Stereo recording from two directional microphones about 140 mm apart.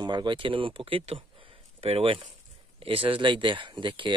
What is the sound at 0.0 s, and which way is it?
Speech, 35° right (ahead or behind).